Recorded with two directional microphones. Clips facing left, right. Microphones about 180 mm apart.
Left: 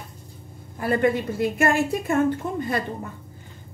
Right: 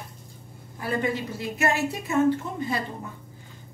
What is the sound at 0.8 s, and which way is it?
A woman's voice, 55° left (ahead or behind).